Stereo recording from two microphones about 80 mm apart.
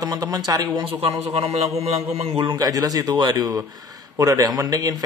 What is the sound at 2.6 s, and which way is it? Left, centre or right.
Speech, right.